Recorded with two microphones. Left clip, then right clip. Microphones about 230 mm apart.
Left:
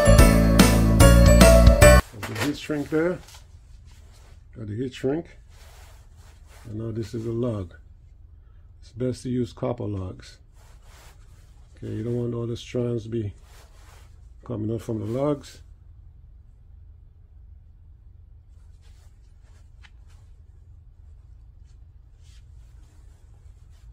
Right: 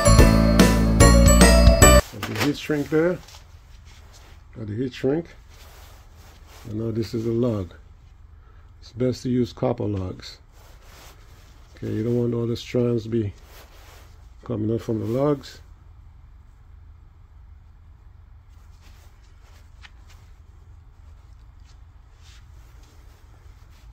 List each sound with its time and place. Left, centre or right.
0.1 s music: centre
2.5 s speech: right
4.6 s speech: centre
6.7 s speech: right
8.8 s speech: right
11.7 s speech: right
14.4 s speech: centre
19.8 s shuffling cards: centre